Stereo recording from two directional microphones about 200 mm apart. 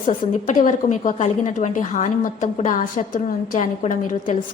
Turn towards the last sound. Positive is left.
turn(degrees=40)  # may be behind; listen again after turning